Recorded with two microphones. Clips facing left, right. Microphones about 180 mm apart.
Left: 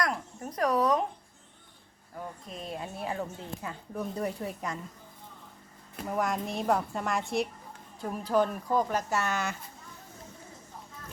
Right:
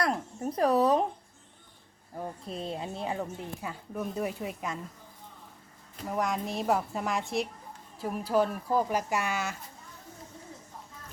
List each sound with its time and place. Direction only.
0.0 s speech: 30° right (ahead or behind)
2.1 s speech: 30° right (ahead or behind)
3.9 s a woman's voice: 5° right (ahead or behind)
6.1 s a woman's voice: centre (ahead or behind)